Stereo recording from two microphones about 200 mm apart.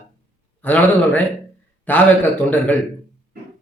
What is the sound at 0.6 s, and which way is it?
A man's voice, 10° left (ahead or behind).